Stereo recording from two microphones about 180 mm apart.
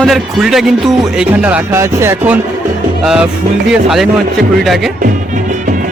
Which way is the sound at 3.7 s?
Centre (ahead or behind).